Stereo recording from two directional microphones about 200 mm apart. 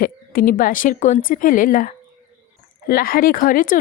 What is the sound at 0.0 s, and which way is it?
A woman's voice, 45° left (ahead or behind).